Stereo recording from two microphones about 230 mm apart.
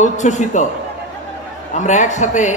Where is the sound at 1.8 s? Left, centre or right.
Left.